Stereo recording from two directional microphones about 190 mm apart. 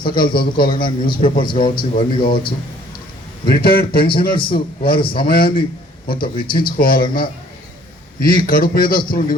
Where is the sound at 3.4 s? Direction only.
55° left (ahead or behind).